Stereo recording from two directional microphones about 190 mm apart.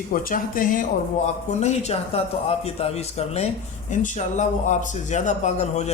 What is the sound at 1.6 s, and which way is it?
Speech, 35° left (ahead or behind).